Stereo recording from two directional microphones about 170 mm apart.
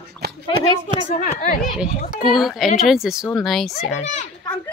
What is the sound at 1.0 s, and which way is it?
Speech, 50° left (ahead or behind).